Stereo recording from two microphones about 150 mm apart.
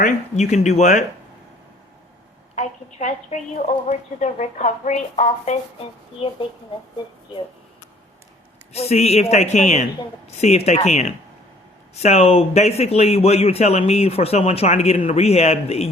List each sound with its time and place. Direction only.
0.0 s a man's voice: 50° left (ahead or behind)
2.6 s a man's voice: 55° left (ahead or behind)
6.2 s speech: 40° left (ahead or behind)
8.7 s a man's voice: 45° left (ahead or behind)